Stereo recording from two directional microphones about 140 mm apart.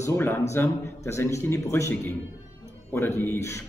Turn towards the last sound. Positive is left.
turn(degrees=20)  # may be behind; listen again after turning